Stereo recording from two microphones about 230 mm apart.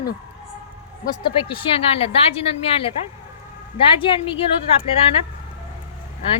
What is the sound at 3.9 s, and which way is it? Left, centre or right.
Speech, left.